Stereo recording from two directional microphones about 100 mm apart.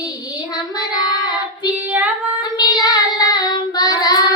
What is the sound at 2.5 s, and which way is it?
Child singing, 45° left (ahead or behind).